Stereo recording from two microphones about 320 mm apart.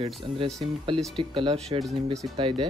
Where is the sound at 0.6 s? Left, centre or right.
Centre.